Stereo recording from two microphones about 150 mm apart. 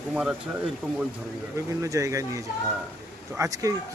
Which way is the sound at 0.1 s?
5° right (ahead or behind).